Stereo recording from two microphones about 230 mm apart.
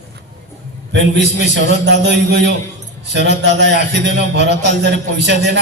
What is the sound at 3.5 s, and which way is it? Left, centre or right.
A man's voice, right.